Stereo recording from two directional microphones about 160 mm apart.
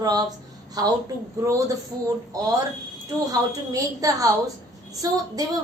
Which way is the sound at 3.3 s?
20° right (ahead or behind).